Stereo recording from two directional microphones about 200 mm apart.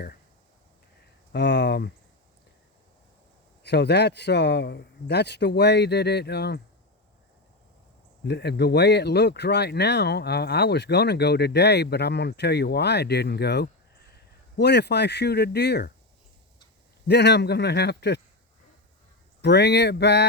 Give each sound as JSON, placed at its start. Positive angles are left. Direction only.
{"t": 1.3, "sound": "speech", "side_deg": 60}
{"t": 3.6, "sound": "speech", "side_deg": 55}
{"t": 8.2, "sound": "speech", "side_deg": 55}
{"t": 17.1, "sound": "speech", "side_deg": 55}
{"t": 19.4, "sound": "speech", "side_deg": 55}